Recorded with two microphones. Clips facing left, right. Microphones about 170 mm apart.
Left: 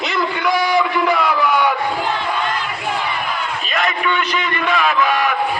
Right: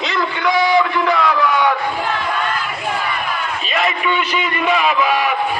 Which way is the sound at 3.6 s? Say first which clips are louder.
Right 1 dB; 5° right (ahead or behind).